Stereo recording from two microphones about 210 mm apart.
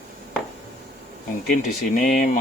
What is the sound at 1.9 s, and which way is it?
Speech, 40° left (ahead or behind).